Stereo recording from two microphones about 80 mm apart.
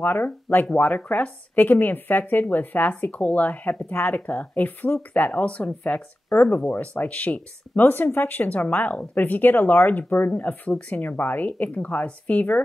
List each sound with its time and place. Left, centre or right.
0.0 s a woman's voice: left